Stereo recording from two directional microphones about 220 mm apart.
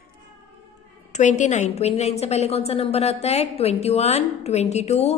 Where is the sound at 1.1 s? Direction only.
35° left (ahead or behind).